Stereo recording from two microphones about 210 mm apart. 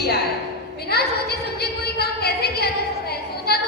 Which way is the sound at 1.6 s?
50° left (ahead or behind).